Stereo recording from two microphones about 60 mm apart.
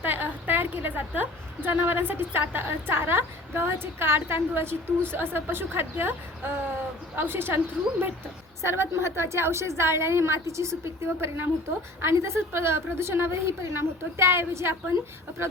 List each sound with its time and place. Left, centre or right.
0.0 s a woman's voice: right